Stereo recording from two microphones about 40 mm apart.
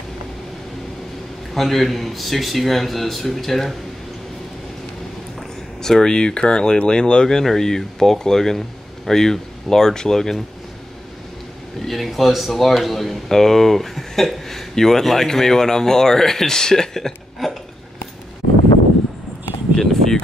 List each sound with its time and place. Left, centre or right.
1.5 s a man's voice: centre
5.8 s speech: centre
11.8 s speech: centre
17.4 s hiccup: centre
19.8 s a sound: centre